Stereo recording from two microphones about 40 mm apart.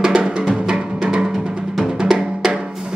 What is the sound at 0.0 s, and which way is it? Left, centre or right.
Music, centre.